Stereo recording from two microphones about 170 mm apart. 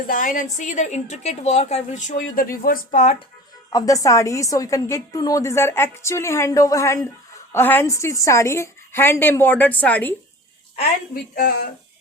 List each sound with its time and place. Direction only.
0.1 s a woman's voice: 50° left (ahead or behind)
3.7 s a woman's voice: 20° left (ahead or behind)
11.1 s a woman's voice: 60° left (ahead or behind)